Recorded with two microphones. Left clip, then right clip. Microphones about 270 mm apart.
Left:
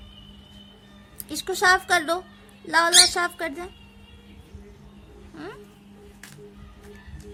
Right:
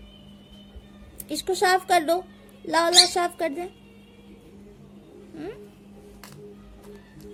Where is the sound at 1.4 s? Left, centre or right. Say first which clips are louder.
Left 2 dB; centre.